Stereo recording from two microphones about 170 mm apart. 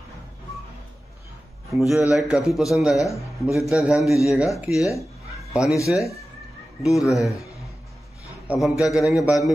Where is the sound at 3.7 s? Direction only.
5° right (ahead or behind).